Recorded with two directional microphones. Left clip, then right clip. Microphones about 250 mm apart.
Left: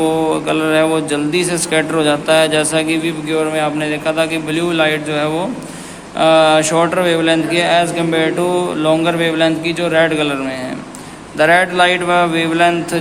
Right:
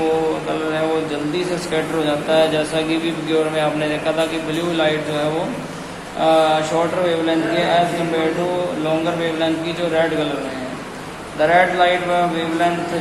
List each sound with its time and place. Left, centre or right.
0.4 s a man's voice: left
11.3 s a man's voice: left